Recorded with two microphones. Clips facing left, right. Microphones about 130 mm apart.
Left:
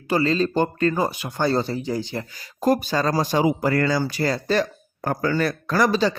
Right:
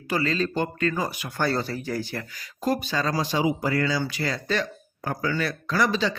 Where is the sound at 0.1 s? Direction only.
30° left (ahead or behind).